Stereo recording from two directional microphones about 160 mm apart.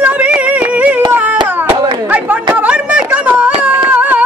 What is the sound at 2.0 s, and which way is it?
Chatter, 10° right (ahead or behind).